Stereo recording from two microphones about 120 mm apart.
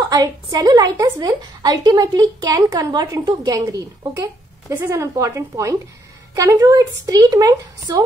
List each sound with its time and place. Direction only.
0.0 s a woman's voice: 30° right (ahead or behind)